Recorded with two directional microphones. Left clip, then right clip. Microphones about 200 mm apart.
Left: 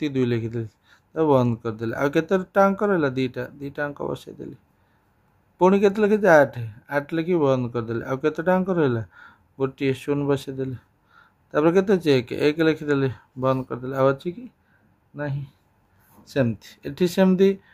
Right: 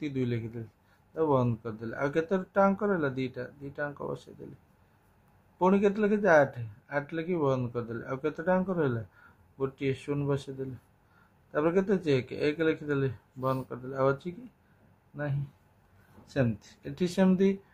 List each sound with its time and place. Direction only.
0.0 s speech: 50° left (ahead or behind)
5.6 s speech: 50° left (ahead or behind)
16.3 s speech: 50° left (ahead or behind)